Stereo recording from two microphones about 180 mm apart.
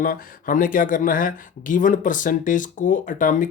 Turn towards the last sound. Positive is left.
turn(degrees=50)  # may be behind; listen again after turning